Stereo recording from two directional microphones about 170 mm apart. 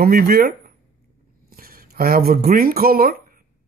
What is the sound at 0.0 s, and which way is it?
Speech, 60° right (ahead or behind).